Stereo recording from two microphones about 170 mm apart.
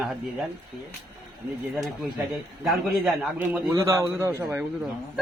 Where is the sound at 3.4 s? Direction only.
15° right (ahead or behind).